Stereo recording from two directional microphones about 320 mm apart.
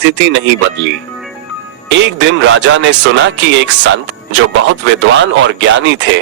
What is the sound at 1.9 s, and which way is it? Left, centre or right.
Speech, right.